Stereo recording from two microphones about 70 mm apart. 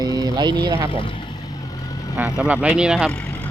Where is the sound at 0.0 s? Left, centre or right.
Right.